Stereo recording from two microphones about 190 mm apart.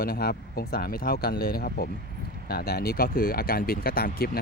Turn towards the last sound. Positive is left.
turn(degrees=50)  # may be behind; listen again after turning